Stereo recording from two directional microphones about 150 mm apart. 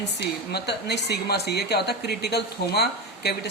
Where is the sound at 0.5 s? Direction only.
90° left.